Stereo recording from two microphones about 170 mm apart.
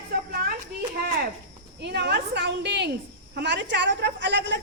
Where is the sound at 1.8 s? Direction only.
80° right.